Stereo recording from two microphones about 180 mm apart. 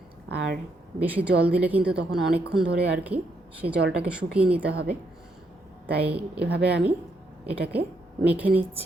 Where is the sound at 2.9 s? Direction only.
10° right (ahead or behind).